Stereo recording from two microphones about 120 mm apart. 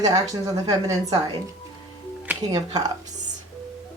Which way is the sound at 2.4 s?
35° right (ahead or behind).